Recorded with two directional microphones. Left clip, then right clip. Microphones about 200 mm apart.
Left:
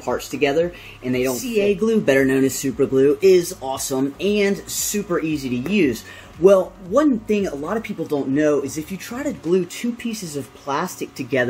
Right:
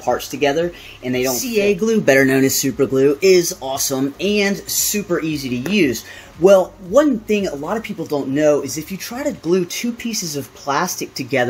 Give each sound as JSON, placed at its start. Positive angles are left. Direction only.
{"t": 0.4, "sound": "speech", "side_deg": -5}
{"t": 1.3, "sound": "speech", "side_deg": -20}